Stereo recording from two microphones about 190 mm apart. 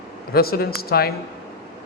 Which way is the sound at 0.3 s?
55° left (ahead or behind).